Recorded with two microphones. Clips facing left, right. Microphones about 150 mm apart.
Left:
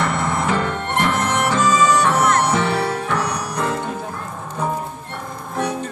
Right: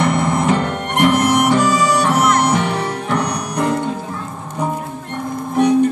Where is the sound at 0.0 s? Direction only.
20° right (ahead or behind).